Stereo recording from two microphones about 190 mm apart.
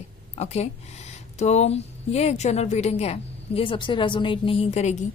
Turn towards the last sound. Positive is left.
turn(degrees=35)  # may be behind; listen again after turning